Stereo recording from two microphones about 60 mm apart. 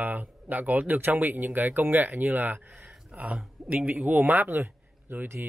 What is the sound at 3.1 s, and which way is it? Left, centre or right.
Speech, right.